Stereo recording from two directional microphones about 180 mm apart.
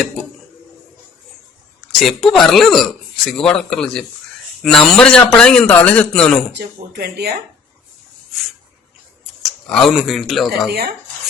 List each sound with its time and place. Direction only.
2.0 s a man's voice: centre (ahead or behind)
6.5 s speech: 65° right (ahead or behind)
9.4 s speech: centre (ahead or behind)